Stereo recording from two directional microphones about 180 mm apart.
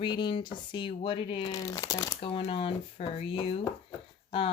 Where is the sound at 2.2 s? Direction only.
30° left (ahead or behind).